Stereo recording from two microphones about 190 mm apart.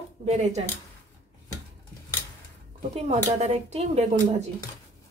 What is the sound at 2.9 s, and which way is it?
A woman's voice, 35° right (ahead or behind).